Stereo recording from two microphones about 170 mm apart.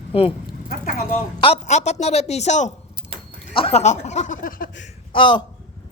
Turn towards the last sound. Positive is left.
turn(degrees=30)  # may be behind; listen again after turning